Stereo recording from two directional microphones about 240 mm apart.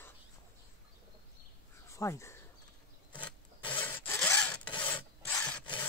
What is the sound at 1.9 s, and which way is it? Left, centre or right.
Speech, centre.